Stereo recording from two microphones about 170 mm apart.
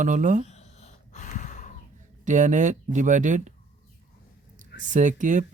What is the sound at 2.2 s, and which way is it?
Speech, 45° right (ahead or behind).